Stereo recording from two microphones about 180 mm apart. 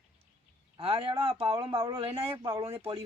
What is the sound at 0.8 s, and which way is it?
Speech, 30° right (ahead or behind).